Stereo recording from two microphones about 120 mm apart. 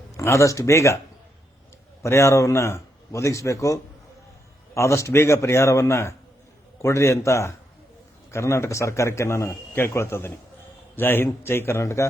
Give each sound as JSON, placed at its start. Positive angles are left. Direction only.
{"t": 0.2, "sound": "a man's voice", "side_deg": 25}
{"t": 2.0, "sound": "a man's voice", "side_deg": 25}